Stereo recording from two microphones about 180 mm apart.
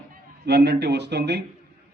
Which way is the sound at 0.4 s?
65° right (ahead or behind).